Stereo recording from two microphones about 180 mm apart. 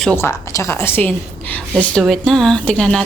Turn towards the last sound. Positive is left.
turn(degrees=5)  # may be behind; listen again after turning